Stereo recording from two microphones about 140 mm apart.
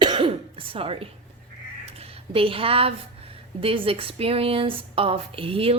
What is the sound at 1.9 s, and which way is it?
A woman's voice, 45° right (ahead or behind).